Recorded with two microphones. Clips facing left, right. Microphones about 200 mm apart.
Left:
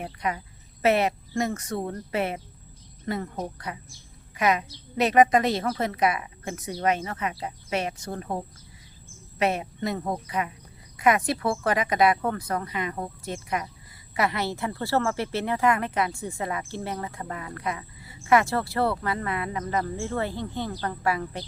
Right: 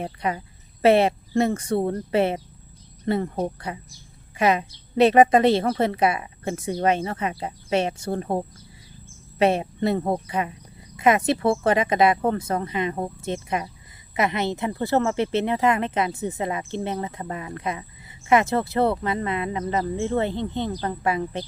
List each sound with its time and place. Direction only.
0.0 s speech: 30° right (ahead or behind)